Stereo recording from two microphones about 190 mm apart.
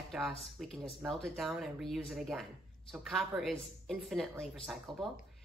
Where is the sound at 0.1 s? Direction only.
Centre (ahead or behind).